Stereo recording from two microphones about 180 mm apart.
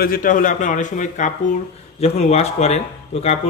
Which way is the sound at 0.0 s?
50° left (ahead or behind).